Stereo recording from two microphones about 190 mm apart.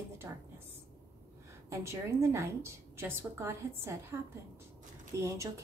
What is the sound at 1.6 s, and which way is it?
Speech, 15° right (ahead or behind).